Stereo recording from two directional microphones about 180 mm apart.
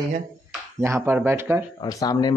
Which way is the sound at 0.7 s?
15° right (ahead or behind).